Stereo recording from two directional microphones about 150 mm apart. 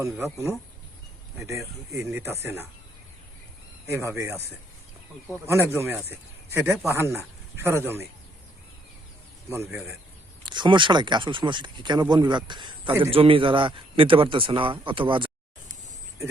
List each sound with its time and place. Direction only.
1.4 s a man's voice: 20° right (ahead or behind)
3.8 s a man's voice: 15° right (ahead or behind)
5.5 s a man's voice: 15° right (ahead or behind)
9.5 s a man's voice: 15° right (ahead or behind)
10.4 s speech: 30° right (ahead or behind)